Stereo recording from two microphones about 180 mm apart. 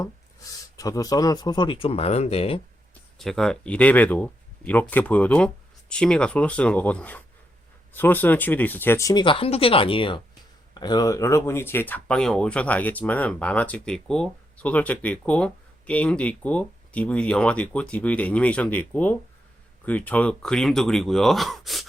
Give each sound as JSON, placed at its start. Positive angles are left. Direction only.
{"t": 0.0, "sound": "speech", "side_deg": 20}
{"t": 3.2, "sound": "speech", "side_deg": 0}